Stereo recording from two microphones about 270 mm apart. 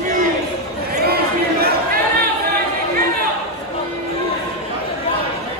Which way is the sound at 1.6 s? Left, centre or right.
Right.